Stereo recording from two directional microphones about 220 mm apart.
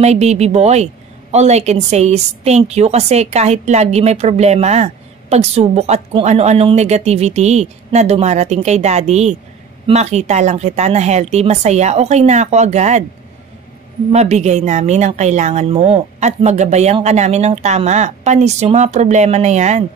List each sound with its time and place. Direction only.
0.0 s a woman's voice: 30° right (ahead or behind)
14.1 s a woman's voice: 30° right (ahead or behind)